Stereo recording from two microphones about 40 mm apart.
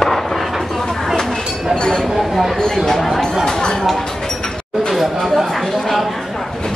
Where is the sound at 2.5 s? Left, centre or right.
Centre.